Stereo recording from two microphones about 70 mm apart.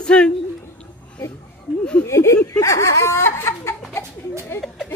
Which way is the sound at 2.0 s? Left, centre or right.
Left.